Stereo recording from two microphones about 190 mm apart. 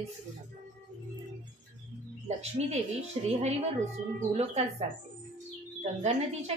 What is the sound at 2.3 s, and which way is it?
A woman's voice, 35° right (ahead or behind).